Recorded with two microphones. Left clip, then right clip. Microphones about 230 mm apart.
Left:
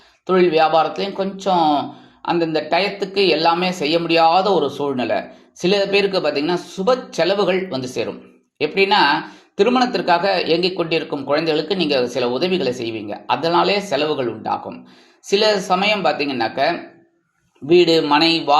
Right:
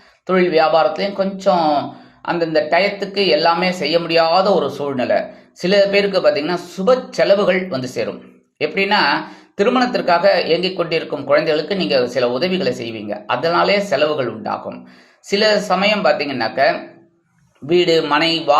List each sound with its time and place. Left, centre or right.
0.3 s speech: centre
17.8 s speech: centre